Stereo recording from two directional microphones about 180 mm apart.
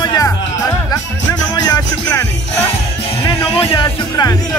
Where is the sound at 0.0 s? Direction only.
20° left (ahead or behind).